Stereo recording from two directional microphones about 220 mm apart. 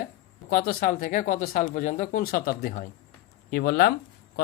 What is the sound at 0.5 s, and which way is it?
Speech, 40° left (ahead or behind).